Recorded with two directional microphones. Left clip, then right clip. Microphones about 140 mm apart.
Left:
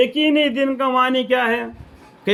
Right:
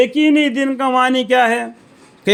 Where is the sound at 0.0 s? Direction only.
60° right (ahead or behind).